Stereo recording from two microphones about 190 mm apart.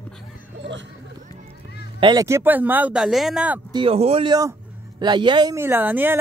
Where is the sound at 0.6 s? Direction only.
70° right (ahead or behind).